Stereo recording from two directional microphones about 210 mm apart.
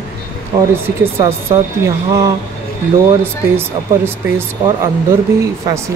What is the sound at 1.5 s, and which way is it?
Speech, 15° right (ahead or behind).